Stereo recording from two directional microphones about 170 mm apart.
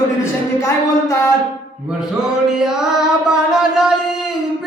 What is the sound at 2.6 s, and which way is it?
Music, 5° right (ahead or behind).